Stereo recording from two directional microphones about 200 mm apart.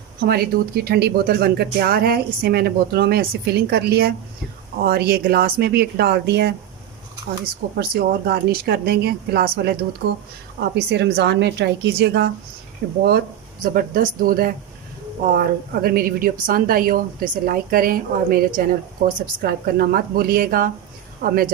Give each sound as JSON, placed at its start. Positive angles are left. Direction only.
{"t": 0.2, "sound": "speech", "side_deg": -50}
{"t": 7.8, "sound": "a woman's voice", "side_deg": -50}